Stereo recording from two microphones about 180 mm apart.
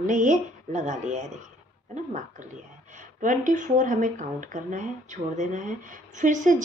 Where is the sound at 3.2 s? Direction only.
45° right (ahead or behind).